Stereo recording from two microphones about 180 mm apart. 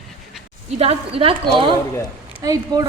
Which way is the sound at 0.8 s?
35° right (ahead or behind).